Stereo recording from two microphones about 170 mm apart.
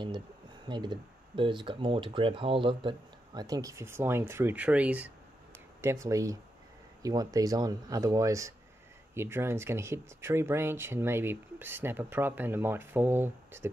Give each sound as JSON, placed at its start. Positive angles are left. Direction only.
{"t": 0.7, "sound": "speech", "side_deg": -25}